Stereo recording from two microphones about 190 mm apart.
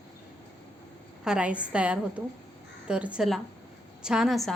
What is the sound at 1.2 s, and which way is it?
A woman's voice, 5° right (ahead or behind).